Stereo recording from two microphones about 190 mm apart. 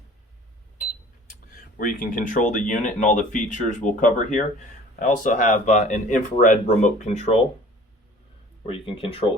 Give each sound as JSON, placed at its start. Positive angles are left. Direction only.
{"t": 1.8, "sound": "speech", "side_deg": 45}
{"t": 8.6, "sound": "speech", "side_deg": 30}